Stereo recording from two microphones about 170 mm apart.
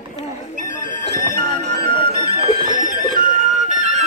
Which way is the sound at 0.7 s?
50° left (ahead or behind).